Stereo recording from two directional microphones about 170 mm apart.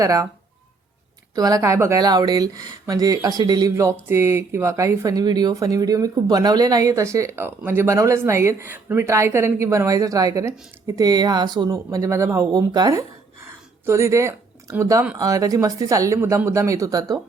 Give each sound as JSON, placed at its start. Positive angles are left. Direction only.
{"t": 0.0, "sound": "speech", "side_deg": -20}
{"t": 1.4, "sound": "speech", "side_deg": -20}